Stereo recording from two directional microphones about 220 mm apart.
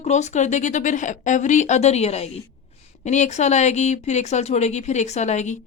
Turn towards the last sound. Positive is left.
turn(degrees=35)  # may be behind; listen again after turning